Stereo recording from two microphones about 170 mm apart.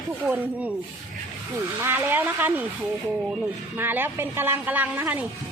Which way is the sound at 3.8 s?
10° right (ahead or behind).